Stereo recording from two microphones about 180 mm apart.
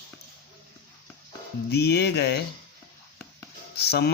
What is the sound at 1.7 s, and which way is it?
Speech, 65° left (ahead or behind).